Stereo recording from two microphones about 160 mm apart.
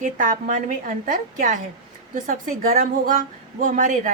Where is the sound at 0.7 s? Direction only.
55° right (ahead or behind).